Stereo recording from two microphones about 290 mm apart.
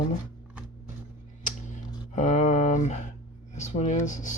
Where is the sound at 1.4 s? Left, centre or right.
Left.